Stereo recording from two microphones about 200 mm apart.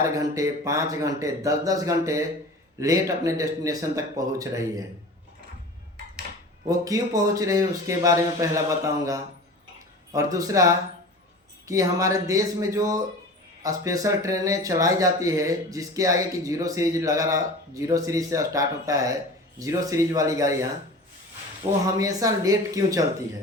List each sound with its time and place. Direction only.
0.0 s speech: 15° right (ahead or behind)
6.7 s speech: 15° right (ahead or behind)
10.1 s speech: 15° right (ahead or behind)
21.9 s speech: 15° right (ahead or behind)